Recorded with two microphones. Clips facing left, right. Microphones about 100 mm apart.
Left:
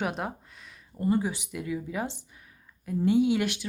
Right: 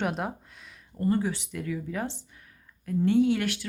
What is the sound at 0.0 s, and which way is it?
Speech, centre (ahead or behind).